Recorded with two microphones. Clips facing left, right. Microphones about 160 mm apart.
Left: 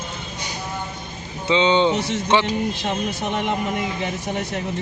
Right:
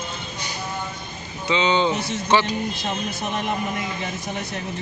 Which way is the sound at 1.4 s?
25° left (ahead or behind).